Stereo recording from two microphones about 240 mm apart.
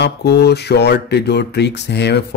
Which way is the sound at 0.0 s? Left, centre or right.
Left.